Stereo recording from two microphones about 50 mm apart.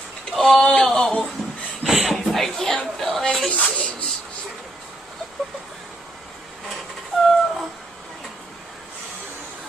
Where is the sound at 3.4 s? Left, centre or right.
Centre.